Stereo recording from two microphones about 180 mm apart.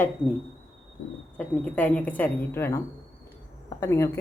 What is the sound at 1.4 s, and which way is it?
A man's voice, 10° left (ahead or behind).